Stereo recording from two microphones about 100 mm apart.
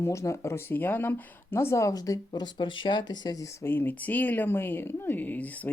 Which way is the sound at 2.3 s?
50° left (ahead or behind).